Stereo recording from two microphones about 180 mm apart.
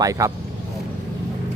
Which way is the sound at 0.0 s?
20° right (ahead or behind).